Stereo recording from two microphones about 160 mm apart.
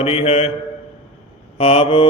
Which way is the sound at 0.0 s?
40° left (ahead or behind).